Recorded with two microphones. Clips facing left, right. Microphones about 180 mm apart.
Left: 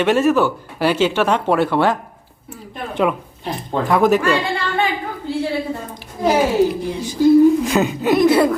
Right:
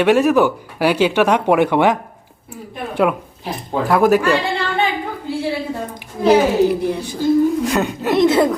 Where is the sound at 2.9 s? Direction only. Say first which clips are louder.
Right 2 dB; 5° right (ahead or behind).